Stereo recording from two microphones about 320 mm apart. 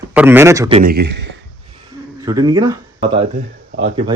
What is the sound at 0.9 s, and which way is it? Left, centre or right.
Speech, right.